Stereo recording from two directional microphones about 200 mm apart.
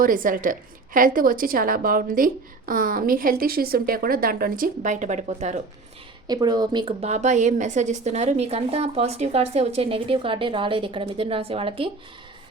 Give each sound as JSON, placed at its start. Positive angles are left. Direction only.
{"t": 0.0, "sound": "a woman's voice", "side_deg": -45}
{"t": 6.2, "sound": "a woman's voice", "side_deg": -20}